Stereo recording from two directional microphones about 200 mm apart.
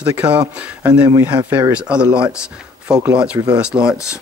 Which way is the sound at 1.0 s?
20° right (ahead or behind).